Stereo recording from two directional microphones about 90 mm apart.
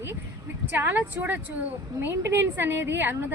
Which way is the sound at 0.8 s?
20° right (ahead or behind).